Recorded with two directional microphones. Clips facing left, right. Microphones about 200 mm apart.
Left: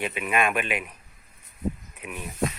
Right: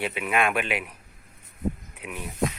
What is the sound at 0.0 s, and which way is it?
Speech, 15° right (ahead or behind).